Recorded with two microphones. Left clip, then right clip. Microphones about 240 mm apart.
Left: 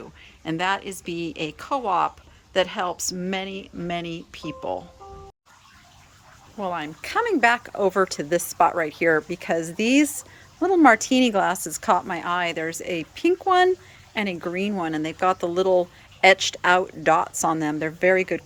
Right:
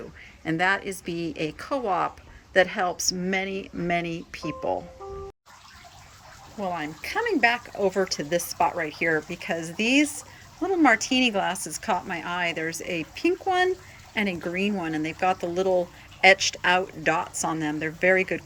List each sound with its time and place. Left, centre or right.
0.4 s a woman's voice: centre
6.6 s speech: centre